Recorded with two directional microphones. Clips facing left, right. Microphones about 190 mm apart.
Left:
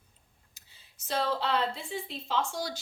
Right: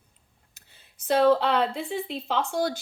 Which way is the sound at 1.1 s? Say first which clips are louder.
Right 9 dB; 60° right (ahead or behind).